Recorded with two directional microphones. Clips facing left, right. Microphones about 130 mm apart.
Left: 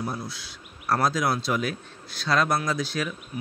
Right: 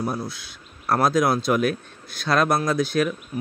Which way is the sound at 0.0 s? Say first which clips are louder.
Right 5 dB; 55° right (ahead or behind).